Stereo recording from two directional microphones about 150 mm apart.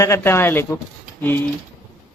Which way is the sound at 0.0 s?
15° left (ahead or behind).